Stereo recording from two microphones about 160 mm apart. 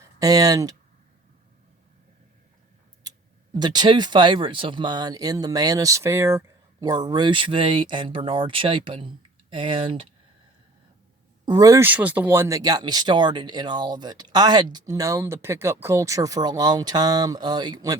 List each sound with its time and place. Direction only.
0.0 s speech: 20° right (ahead or behind)
3.5 s speech: 25° right (ahead or behind)
11.4 s speech: 25° right (ahead or behind)
11.9 s speech: 10° right (ahead or behind); by 17.9 s 25° right (ahead or behind)